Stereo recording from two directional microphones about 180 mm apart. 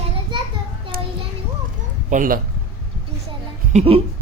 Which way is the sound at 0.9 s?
55° right (ahead or behind).